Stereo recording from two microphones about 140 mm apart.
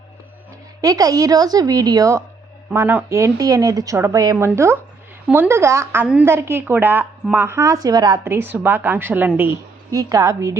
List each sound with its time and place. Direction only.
0.8 s a woman's voice: 25° right (ahead or behind)
9.9 s speech: 25° right (ahead or behind)